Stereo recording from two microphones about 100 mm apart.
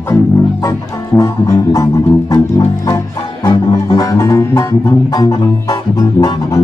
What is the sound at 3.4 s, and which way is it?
Music, 40° left (ahead or behind).